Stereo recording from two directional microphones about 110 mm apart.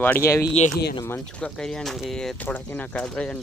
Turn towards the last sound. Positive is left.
turn(degrees=10)  # may be behind; listen again after turning